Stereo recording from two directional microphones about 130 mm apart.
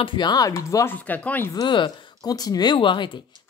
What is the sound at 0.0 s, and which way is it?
Speech, 35° left (ahead or behind).